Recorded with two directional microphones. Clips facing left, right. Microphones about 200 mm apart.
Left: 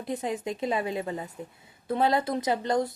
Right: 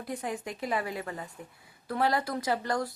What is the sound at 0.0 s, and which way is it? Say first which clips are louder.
Speech: left 4 dB; 25° left (ahead or behind).